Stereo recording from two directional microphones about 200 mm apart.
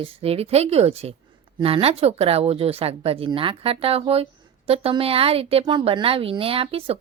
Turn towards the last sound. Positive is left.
turn(degrees=-30)  # may be behind; listen again after turning